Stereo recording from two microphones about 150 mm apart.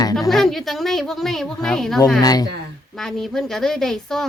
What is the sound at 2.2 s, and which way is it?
Speech, 25° left (ahead or behind).